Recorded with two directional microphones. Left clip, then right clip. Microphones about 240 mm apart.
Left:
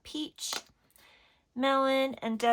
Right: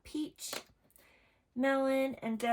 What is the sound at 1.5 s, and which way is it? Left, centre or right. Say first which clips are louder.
Speech: left 4 dB; centre.